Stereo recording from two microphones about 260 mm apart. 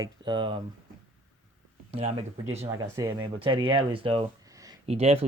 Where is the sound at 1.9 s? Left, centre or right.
Right.